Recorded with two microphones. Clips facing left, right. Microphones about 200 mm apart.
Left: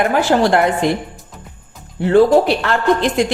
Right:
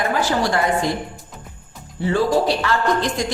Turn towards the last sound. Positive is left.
turn(degrees=60)  # may be behind; listen again after turning